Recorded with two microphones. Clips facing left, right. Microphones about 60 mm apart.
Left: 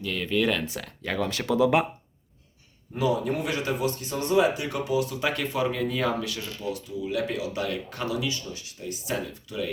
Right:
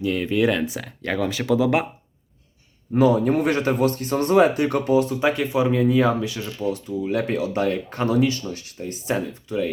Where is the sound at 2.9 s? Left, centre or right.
Right.